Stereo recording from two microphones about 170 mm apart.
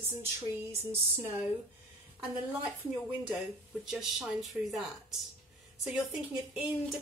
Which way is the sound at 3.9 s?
Centre (ahead or behind).